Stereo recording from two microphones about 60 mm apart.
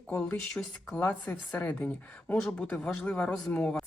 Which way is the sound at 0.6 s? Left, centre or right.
Left.